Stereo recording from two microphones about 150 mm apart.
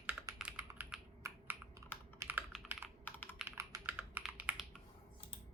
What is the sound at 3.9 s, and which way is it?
Computer keyboard, 10° right (ahead or behind).